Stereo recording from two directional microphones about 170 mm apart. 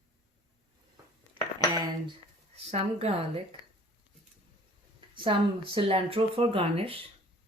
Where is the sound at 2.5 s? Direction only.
35° right (ahead or behind).